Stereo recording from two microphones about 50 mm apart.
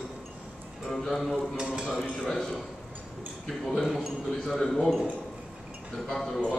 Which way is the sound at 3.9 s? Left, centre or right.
Centre.